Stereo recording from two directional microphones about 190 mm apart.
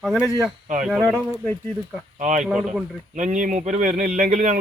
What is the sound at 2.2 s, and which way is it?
Speech, 40° right (ahead or behind).